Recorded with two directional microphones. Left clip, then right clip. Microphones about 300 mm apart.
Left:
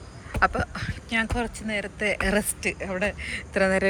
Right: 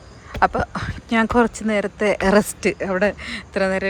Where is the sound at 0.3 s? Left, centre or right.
Centre.